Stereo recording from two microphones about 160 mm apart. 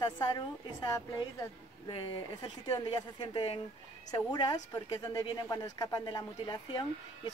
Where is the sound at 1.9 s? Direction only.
30° left (ahead or behind).